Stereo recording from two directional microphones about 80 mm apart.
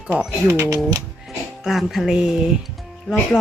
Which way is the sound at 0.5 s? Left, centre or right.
Right.